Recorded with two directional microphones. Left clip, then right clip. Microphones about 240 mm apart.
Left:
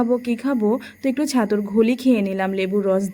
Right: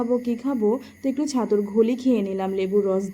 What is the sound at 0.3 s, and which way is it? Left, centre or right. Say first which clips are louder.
Speech: left 2 dB; left.